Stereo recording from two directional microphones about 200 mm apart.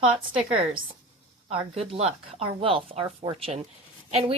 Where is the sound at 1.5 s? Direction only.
30° right (ahead or behind).